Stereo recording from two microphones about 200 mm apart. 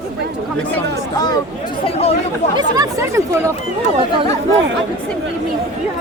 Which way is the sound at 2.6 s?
15° right (ahead or behind).